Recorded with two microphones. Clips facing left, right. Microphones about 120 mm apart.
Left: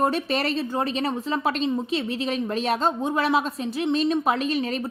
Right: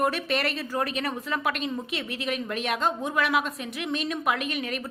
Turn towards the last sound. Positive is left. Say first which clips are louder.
# left 6 dB
turn(degrees=30)  # may be behind; listen again after turning